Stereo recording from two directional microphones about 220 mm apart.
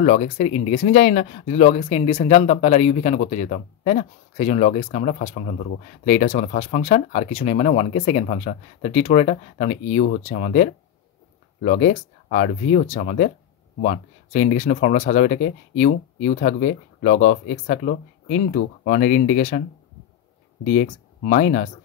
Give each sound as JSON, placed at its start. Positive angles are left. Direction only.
{"t": 0.0, "sound": "speech", "side_deg": 35}
{"t": 20.7, "sound": "speech", "side_deg": 35}